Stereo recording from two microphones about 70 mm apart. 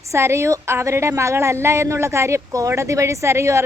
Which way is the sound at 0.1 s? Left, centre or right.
Right.